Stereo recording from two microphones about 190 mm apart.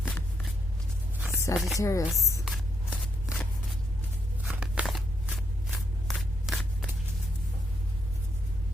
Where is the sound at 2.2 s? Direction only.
15° left (ahead or behind).